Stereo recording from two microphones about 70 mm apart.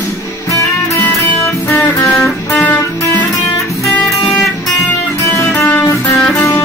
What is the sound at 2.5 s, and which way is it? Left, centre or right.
Music, left.